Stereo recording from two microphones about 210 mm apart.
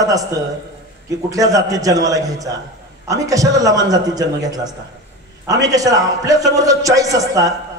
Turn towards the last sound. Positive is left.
turn(degrees=-15)  # may be behind; listen again after turning